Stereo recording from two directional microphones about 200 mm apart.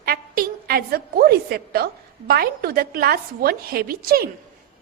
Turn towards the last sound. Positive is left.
turn(degrees=-50)  # may be behind; listen again after turning